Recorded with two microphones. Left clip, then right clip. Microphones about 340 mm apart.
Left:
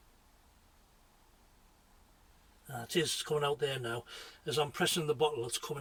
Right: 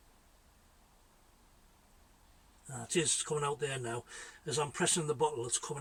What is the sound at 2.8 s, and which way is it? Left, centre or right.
Speech, centre.